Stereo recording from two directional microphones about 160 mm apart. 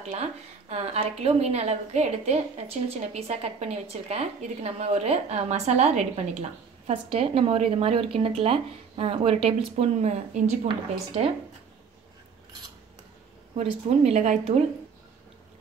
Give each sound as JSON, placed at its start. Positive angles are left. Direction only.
{"t": 0.0, "sound": "a woman's voice", "side_deg": -40}
{"t": 13.6, "sound": "speech", "side_deg": -45}